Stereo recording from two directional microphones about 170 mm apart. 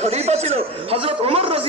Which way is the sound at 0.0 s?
40° right (ahead or behind).